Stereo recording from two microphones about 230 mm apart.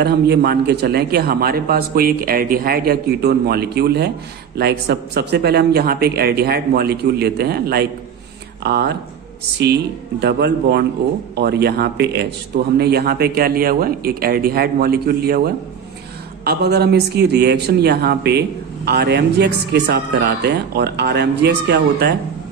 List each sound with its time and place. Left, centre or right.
0.0 s a man's voice: right
10.2 s a man's voice: right